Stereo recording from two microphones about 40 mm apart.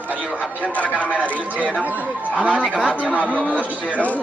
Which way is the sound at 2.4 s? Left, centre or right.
Right.